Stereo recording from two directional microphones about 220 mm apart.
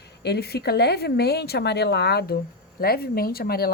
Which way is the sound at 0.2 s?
45° left (ahead or behind).